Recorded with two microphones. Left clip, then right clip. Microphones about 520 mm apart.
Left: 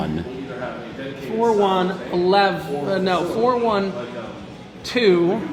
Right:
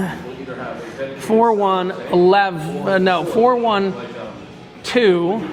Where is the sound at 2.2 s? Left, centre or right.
Right.